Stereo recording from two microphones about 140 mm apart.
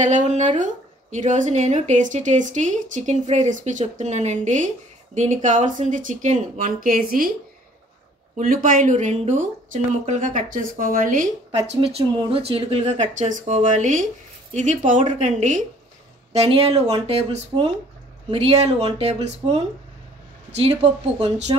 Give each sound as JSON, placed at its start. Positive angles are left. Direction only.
{"t": 0.0, "sound": "speech", "side_deg": -60}
{"t": 8.4, "sound": "speech", "side_deg": -75}
{"t": 16.3, "sound": "speech", "side_deg": -45}
{"t": 20.6, "sound": "speech", "side_deg": -50}